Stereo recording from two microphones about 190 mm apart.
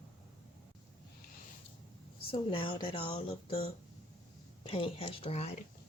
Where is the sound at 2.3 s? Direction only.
30° left (ahead or behind).